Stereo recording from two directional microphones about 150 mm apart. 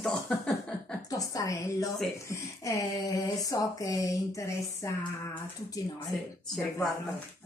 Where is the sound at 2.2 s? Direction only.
20° left (ahead or behind).